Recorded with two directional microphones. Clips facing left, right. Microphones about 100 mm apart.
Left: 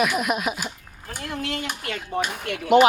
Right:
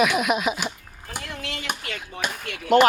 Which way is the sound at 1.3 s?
45° left (ahead or behind).